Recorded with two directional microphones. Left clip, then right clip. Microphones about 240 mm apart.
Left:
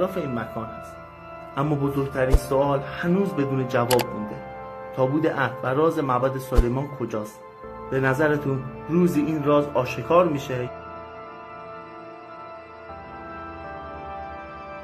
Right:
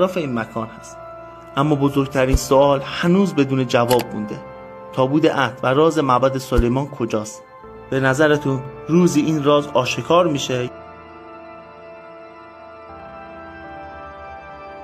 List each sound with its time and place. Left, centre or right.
0.0 s speech: right
4.9 s speech: right